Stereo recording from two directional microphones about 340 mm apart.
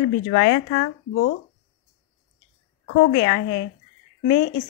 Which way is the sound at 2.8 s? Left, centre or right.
Left.